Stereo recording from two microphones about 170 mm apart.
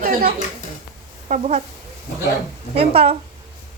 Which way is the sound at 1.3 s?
40° right (ahead or behind).